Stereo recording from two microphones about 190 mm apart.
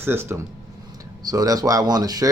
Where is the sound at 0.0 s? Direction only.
10° right (ahead or behind).